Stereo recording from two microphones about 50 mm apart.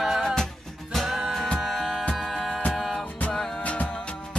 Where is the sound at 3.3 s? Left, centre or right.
Centre.